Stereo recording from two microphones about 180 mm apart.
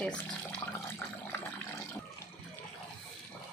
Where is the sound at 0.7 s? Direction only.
10° left (ahead or behind).